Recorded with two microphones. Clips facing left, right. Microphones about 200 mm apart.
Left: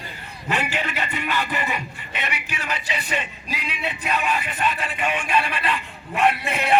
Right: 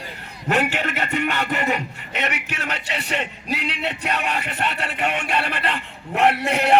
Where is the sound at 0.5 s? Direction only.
50° right (ahead or behind).